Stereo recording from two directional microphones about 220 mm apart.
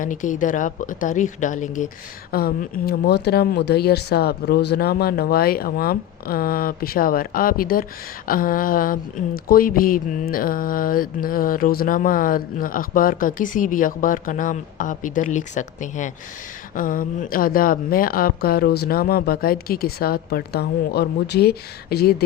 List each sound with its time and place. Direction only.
0.0 s speech: 35° left (ahead or behind)